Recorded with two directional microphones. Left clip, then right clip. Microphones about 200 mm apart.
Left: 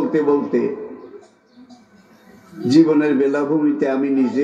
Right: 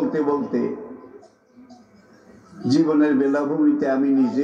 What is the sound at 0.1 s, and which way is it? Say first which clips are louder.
Speech: left 5 dB; 40° left (ahead or behind).